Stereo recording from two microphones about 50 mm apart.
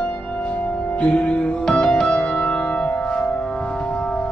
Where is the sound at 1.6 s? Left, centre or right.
Centre.